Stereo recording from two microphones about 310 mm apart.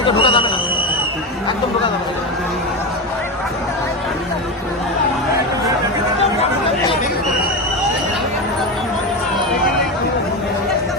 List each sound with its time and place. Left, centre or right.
0.0 s a man's voice: centre